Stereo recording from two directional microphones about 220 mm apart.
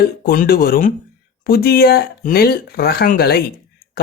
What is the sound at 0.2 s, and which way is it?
A man's voice, 40° left (ahead or behind).